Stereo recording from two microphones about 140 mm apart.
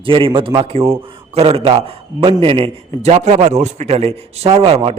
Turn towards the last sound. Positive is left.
turn(degrees=-45)  # may be behind; listen again after turning